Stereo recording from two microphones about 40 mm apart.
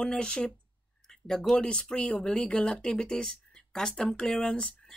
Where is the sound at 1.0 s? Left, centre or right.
Centre.